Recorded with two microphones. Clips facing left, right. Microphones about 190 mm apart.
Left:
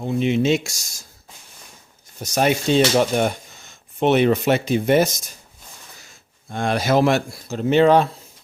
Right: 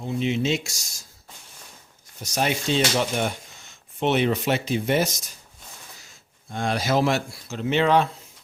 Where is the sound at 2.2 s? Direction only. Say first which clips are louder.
Left 6 dB; 50° left (ahead or behind).